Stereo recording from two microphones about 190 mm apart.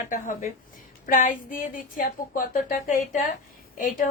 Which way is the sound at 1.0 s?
45° left (ahead or behind).